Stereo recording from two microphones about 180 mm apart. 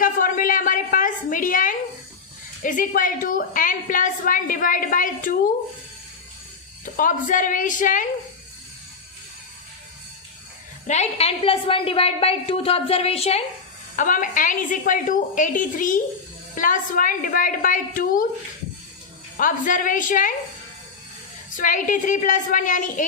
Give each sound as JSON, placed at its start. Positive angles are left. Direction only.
{"t": 0.0, "sound": "a sound", "side_deg": 50}
{"t": 2.6, "sound": "a woman's voice", "side_deg": 45}
{"t": 6.8, "sound": "a woman's voice", "side_deg": 45}
{"t": 10.8, "sound": "a woman's voice", "side_deg": 40}
{"t": 13.9, "sound": "a woman's voice", "side_deg": 45}
{"t": 19.4, "sound": "a woman's voice", "side_deg": 45}
{"t": 21.5, "sound": "a woman's voice", "side_deg": 45}